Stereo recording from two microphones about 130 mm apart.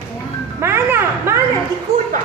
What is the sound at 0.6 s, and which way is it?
Music, 20° right (ahead or behind).